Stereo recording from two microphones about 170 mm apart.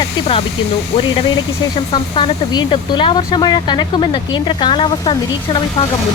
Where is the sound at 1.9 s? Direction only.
30° left (ahead or behind).